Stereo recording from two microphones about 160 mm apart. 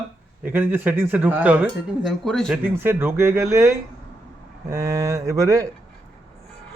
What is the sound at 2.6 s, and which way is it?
Speech, 15° right (ahead or behind).